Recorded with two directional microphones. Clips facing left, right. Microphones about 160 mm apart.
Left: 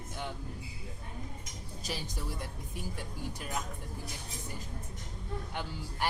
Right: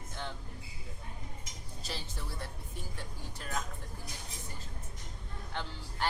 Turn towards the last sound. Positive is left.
turn(degrees=10)  # may be behind; listen again after turning